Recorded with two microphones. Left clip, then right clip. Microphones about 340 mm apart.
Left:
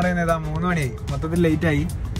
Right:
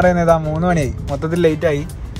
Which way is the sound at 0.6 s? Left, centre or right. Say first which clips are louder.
Right 7 dB; centre.